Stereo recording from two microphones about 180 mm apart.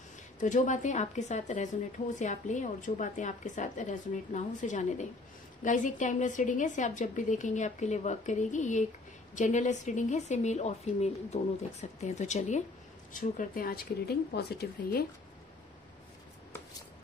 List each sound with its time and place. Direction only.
0.4 s a woman's voice: 45° left (ahead or behind); by 15.0 s 65° left (ahead or behind)